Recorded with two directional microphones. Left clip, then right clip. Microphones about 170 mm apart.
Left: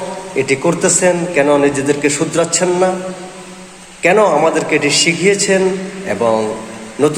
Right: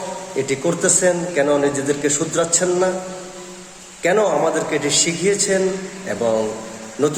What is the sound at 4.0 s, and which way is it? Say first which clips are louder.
A man's voice: left 6 dB; 15° right (ahead or behind).